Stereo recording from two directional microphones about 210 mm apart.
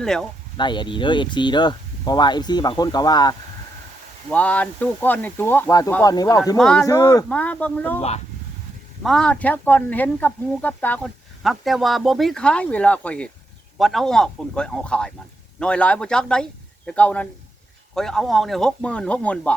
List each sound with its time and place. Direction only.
0.0 s speech: centre (ahead or behind)
0.5 s speech: 20° left (ahead or behind)
4.3 s speech: 5° left (ahead or behind)
6.6 s speech: centre (ahead or behind)
6.8 s speech: 15° left (ahead or behind)
7.3 s speech: 5° left (ahead or behind)
9.0 s a man's voice: 5° left (ahead or behind)